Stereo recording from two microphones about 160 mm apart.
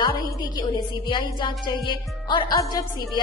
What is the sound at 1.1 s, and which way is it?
Speech, 30° left (ahead or behind).